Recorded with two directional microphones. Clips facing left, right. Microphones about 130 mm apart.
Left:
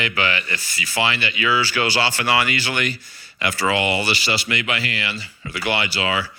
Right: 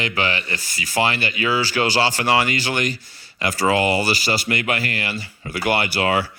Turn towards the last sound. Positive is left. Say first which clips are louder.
# right 3 dB
turn(degrees=-50)  # may be behind; listen again after turning